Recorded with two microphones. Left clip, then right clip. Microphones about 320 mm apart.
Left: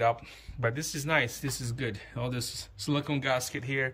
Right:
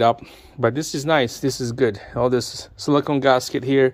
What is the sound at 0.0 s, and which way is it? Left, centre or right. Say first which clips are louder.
Speech: right 10 dB; centre.